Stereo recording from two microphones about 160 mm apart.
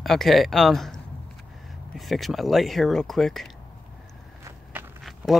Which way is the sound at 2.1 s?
Centre (ahead or behind).